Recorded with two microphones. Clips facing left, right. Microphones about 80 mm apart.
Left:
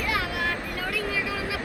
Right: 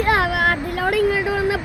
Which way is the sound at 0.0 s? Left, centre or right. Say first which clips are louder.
Right 10 dB; right.